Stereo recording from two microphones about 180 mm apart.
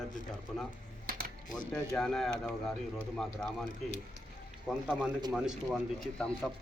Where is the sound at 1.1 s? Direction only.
55° right (ahead or behind).